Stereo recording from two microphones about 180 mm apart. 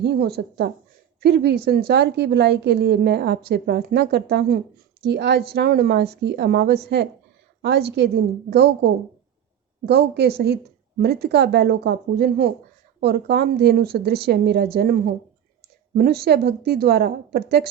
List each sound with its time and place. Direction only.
0.0 s a woman's voice: 65° right (ahead or behind)